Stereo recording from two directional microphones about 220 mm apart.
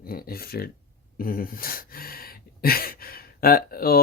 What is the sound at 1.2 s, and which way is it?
Speech, 40° left (ahead or behind).